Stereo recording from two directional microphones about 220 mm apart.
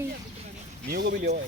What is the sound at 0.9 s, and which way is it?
Speech, 45° right (ahead or behind).